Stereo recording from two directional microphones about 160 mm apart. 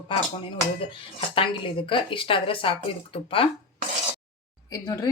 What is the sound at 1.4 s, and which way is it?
A woman's voice, 30° left (ahead or behind).